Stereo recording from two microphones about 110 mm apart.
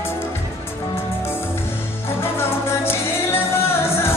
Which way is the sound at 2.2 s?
25° left (ahead or behind).